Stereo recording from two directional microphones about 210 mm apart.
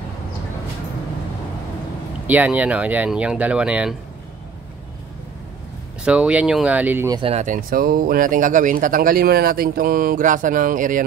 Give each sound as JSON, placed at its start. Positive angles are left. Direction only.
{"t": 2.2, "sound": "speech", "side_deg": -5}
{"t": 6.0, "sound": "speech", "side_deg": -5}
{"t": 7.2, "sound": "speech", "side_deg": -30}